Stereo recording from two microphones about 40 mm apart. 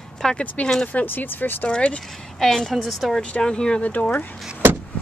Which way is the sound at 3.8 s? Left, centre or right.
Left.